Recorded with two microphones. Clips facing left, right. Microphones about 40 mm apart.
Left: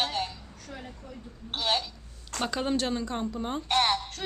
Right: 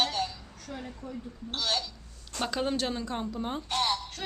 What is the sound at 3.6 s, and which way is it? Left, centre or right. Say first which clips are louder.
Speech: left 5 dB; left.